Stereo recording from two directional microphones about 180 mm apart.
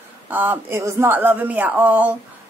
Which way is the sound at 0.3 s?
10° right (ahead or behind).